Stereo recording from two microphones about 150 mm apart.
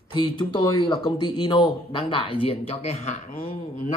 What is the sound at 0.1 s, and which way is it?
Speech, 35° left (ahead or behind).